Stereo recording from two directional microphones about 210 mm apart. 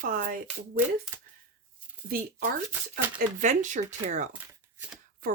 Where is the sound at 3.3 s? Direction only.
35° right (ahead or behind).